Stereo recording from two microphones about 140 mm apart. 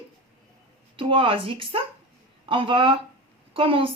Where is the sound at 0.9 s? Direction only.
40° right (ahead or behind).